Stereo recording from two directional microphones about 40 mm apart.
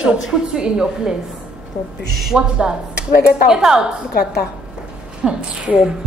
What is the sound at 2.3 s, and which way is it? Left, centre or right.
A woman's voice, right.